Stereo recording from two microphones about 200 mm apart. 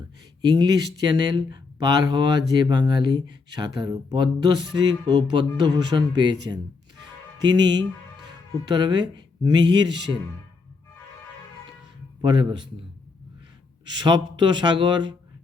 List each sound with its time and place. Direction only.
0.4 s speech: 20° right (ahead or behind)
12.2 s speech: 25° right (ahead or behind)
13.8 s speech: 20° right (ahead or behind)